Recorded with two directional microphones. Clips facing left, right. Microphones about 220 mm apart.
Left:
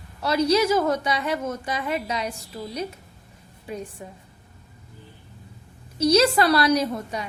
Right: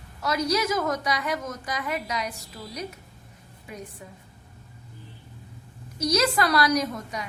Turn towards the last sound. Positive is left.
turn(degrees=30)  # may be behind; listen again after turning